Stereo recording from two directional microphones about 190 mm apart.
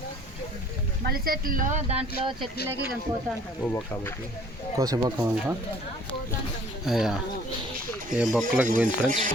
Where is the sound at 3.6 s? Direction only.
10° left (ahead or behind).